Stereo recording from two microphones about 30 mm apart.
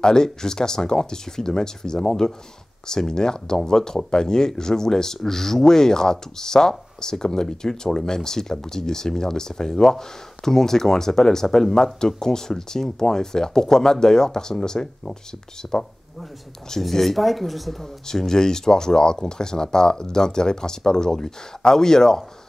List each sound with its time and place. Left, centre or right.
0.0 s speech: centre
16.9 s speech: centre
18.0 s speech: centre